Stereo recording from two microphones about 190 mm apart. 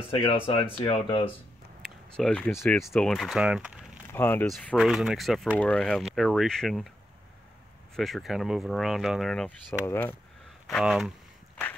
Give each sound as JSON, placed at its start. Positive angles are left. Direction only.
{"t": 0.1, "sound": "speech", "side_deg": 25}
{"t": 2.1, "sound": "speech", "side_deg": 5}
{"t": 4.1, "sound": "speech", "side_deg": 10}
{"t": 7.9, "sound": "speech", "side_deg": 0}
{"t": 10.7, "sound": "speech", "side_deg": 0}